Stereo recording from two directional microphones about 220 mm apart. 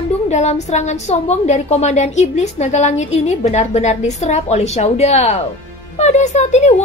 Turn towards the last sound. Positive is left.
turn(degrees=30)  # may be behind; listen again after turning